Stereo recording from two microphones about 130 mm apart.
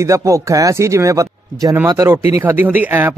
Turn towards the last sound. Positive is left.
turn(degrees=-15)  # may be behind; listen again after turning